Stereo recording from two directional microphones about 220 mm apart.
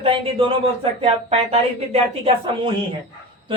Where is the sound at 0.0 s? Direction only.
25° right (ahead or behind).